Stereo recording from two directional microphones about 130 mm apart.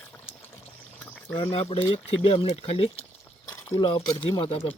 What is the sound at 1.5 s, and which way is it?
Speech, 45° left (ahead or behind).